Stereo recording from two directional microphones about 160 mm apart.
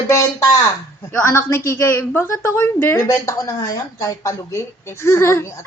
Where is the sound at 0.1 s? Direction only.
20° left (ahead or behind).